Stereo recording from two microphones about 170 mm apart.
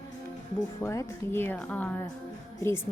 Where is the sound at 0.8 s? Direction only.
15° left (ahead or behind).